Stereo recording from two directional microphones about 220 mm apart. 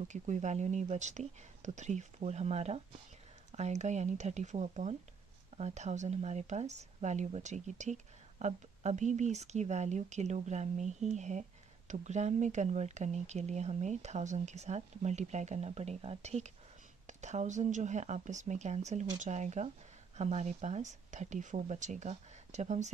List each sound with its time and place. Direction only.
0.1 s speech: 35° right (ahead or behind)